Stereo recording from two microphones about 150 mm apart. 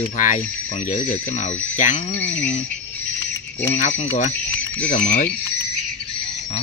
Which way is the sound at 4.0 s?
50° left (ahead or behind).